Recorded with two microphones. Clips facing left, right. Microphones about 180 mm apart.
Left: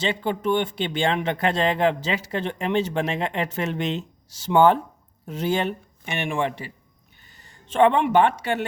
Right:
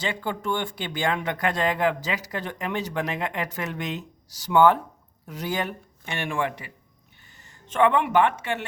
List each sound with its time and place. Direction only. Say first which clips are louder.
0.0 s speech: left 5 dB; 25° left (ahead or behind)